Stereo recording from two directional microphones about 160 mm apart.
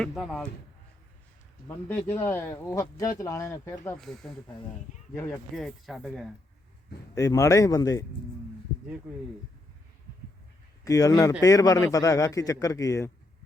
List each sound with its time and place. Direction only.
0.0 s speech: centre (ahead or behind)
1.6 s speech: 10° left (ahead or behind)
3.9 s speech: 5° left (ahead or behind)
7.2 s a man's voice: 20° left (ahead or behind)
10.8 s a man's voice: 20° left (ahead or behind)